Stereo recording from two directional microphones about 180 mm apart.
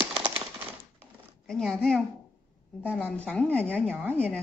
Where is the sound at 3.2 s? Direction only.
5° left (ahead or behind).